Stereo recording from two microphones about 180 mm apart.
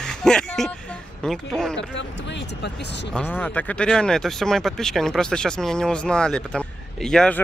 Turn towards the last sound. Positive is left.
turn(degrees=5)  # may be behind; listen again after turning